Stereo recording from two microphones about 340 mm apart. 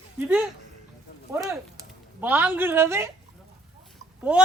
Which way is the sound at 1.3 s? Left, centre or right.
Centre.